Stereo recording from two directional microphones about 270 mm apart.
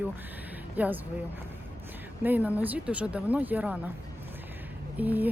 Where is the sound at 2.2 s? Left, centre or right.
Centre.